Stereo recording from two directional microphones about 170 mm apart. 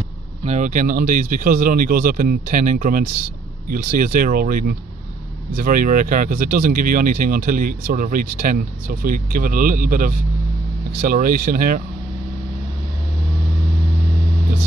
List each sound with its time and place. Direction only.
0.5 s speech: 45° right (ahead or behind)